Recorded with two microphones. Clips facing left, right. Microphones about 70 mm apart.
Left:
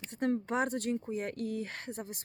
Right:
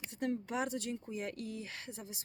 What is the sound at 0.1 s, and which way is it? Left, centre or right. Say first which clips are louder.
Speech: left 5 dB; left.